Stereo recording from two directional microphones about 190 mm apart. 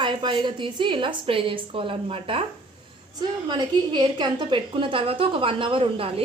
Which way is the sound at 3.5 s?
25° right (ahead or behind).